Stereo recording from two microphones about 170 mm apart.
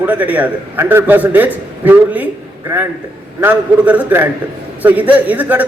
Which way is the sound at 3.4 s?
10° right (ahead or behind).